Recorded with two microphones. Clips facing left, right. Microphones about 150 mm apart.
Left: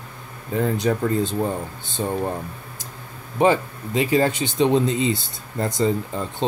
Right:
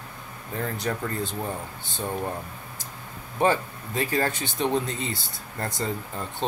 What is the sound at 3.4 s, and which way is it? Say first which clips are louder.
Speech: left 5 dB; 15° left (ahead or behind).